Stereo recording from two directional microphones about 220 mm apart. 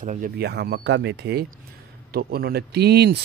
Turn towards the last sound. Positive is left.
turn(degrees=-50)  # may be behind; listen again after turning